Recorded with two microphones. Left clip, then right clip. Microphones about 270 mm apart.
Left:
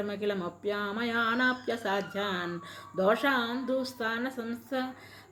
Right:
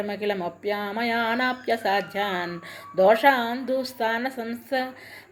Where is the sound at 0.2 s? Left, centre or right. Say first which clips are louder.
Right 5 dB; centre.